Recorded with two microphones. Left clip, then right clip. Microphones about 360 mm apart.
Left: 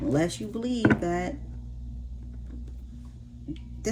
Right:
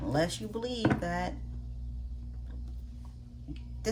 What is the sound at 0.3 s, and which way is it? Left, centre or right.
Speech, centre.